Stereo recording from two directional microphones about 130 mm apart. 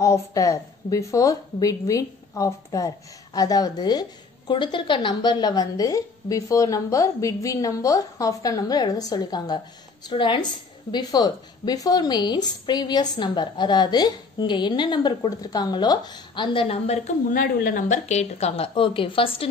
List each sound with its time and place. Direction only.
0.0 s a woman's voice: 25° left (ahead or behind); by 17.0 s 50° left (ahead or behind)
17.3 s a woman's voice: 90° left; by 19.5 s 45° left (ahead or behind)